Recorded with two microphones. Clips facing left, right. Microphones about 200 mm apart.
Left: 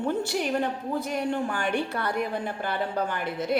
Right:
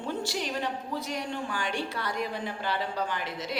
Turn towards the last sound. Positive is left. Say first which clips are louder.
# left 7 dB
turn(degrees=55)  # may be behind; listen again after turning